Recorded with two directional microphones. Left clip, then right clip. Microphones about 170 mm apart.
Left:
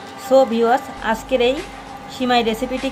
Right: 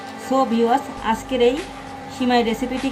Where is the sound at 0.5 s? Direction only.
30° left (ahead or behind).